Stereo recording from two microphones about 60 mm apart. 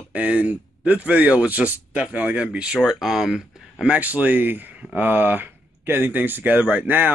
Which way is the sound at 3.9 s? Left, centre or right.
Right.